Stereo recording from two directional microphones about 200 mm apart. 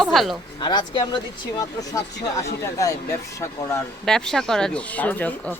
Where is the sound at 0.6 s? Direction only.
20° left (ahead or behind).